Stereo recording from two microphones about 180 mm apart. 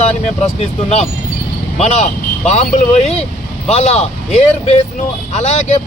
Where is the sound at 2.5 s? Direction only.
35° left (ahead or behind).